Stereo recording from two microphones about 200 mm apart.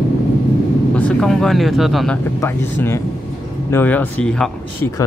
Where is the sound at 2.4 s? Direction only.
15° left (ahead or behind).